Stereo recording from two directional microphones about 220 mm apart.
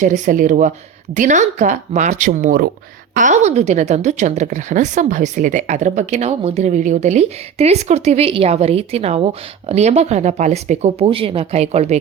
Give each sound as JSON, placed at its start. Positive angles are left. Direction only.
{"t": 0.0, "sound": "a woman's voice", "side_deg": -35}